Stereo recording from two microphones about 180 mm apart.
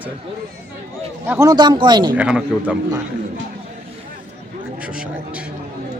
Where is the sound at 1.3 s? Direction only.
15° right (ahead or behind).